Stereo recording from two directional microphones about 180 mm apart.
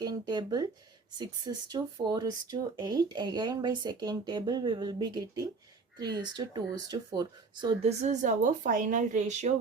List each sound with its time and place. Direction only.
0.0 s speech: 25° right (ahead or behind); by 9.5 s 40° right (ahead or behind)